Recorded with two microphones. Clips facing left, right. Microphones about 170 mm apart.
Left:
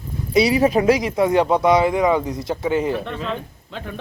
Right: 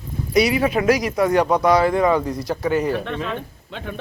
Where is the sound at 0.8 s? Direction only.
25° left (ahead or behind).